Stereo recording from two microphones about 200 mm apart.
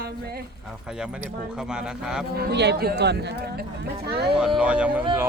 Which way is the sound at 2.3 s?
60° right (ahead or behind).